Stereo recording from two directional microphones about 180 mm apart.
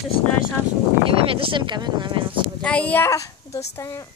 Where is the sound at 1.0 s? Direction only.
30° right (ahead or behind).